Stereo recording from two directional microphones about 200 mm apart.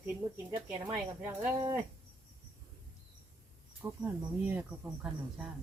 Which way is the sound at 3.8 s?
10° right (ahead or behind).